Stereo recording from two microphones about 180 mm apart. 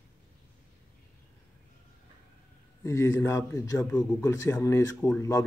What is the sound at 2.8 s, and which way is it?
Speech, 15° left (ahead or behind).